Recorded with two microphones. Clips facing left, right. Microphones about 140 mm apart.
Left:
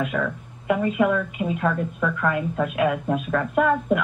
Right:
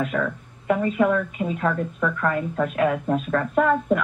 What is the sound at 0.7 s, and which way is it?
Speech, 10° left (ahead or behind).